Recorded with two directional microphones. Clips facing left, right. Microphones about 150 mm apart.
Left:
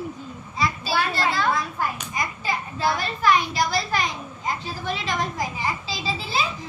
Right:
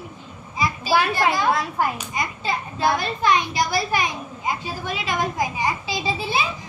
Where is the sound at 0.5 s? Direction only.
15° right (ahead or behind).